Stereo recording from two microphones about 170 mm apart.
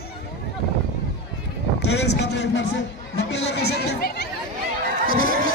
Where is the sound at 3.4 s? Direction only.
80° left.